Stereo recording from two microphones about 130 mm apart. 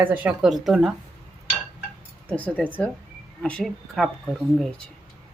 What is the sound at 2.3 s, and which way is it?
Speech, 10° left (ahead or behind).